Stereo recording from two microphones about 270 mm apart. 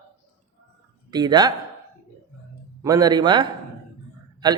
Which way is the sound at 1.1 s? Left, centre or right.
Centre.